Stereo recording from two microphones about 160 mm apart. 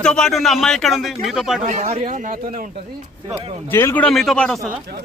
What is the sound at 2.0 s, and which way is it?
Speech, 55° right (ahead or behind).